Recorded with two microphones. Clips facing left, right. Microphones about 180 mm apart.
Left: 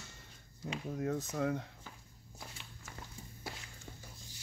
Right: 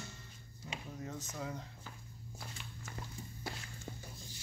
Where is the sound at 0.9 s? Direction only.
60° left (ahead or behind).